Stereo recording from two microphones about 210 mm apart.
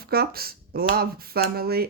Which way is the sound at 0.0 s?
45° right (ahead or behind).